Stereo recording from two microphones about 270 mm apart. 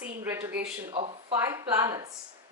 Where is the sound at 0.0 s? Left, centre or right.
Centre.